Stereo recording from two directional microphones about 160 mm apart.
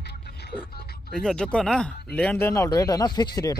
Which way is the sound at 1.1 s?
5° left (ahead or behind).